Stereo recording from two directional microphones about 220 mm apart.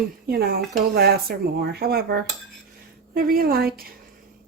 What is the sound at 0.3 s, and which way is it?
Speech, 45° right (ahead or behind).